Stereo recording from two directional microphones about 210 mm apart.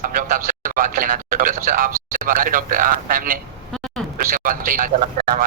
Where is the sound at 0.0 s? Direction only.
40° right (ahead or behind).